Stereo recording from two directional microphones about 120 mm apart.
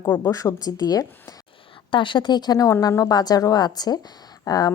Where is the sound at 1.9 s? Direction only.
45° left (ahead or behind).